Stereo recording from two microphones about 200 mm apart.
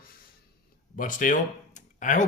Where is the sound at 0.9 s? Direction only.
40° left (ahead or behind).